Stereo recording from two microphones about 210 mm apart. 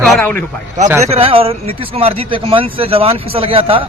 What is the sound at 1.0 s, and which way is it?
A man's voice, 30° right (ahead or behind).